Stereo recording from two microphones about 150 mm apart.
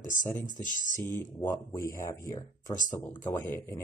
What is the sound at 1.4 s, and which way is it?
Speech, 20° left (ahead or behind).